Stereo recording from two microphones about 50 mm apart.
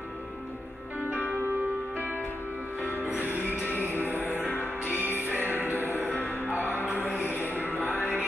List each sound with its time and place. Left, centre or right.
3.5 s music: left
3.8 s music: right
4.3 s music: left
4.8 s music: right
5.9 s music: left